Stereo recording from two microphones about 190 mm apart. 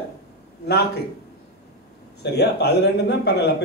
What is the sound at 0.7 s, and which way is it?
Speech, 60° left (ahead or behind).